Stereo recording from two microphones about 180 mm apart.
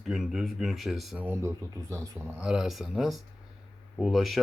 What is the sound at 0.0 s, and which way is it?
Speech, centre (ahead or behind).